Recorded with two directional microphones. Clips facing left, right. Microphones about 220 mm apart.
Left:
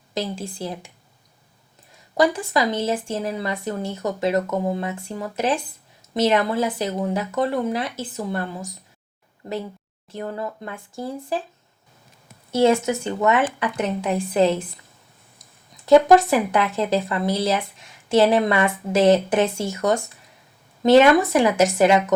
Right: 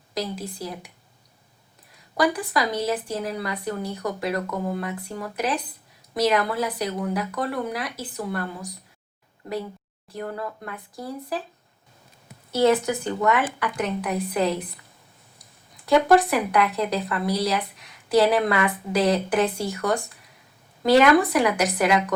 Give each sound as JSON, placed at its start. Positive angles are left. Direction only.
{"t": 0.1, "sound": "speech", "side_deg": 25}
{"t": 2.1, "sound": "speech", "side_deg": 25}
{"t": 10.1, "sound": "speech", "side_deg": 25}
{"t": 12.5, "sound": "speech", "side_deg": 25}
{"t": 15.9, "sound": "speech", "side_deg": 25}
{"t": 21.3, "sound": "speech", "side_deg": 25}